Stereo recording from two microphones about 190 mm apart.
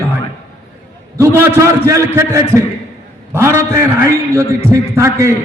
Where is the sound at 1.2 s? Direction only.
15° right (ahead or behind).